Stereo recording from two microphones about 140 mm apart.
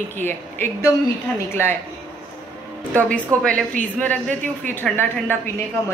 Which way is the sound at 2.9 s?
10° left (ahead or behind).